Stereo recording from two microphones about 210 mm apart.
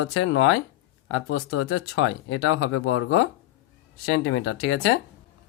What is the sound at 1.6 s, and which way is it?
Speech, 80° left.